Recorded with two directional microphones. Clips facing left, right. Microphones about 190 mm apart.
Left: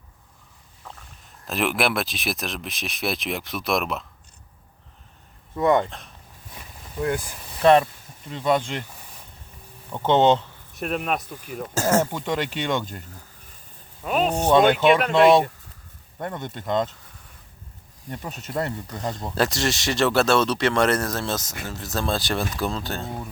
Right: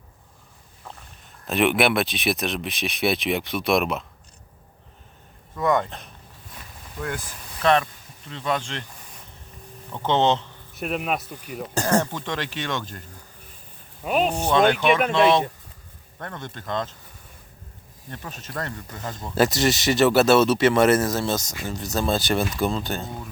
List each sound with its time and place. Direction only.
1.5 s speech: centre (ahead or behind)
5.5 s speech: 25° left (ahead or behind)
8.3 s speech: 10° left (ahead or behind)
9.9 s speech: 10° left (ahead or behind)
10.8 s speech: centre (ahead or behind)
14.0 s speech: 10° right (ahead or behind)
14.4 s speech: 15° left (ahead or behind)
16.1 s speech: 20° left (ahead or behind)
18.1 s speech: 20° left (ahead or behind)
19.3 s speech: centre (ahead or behind)